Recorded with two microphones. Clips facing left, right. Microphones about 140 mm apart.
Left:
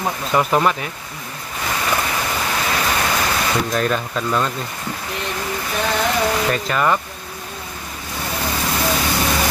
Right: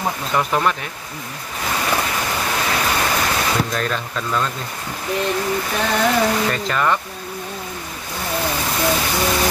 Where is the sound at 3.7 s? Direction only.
10° left (ahead or behind).